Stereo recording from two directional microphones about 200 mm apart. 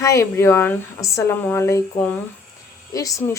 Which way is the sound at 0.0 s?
15° left (ahead or behind).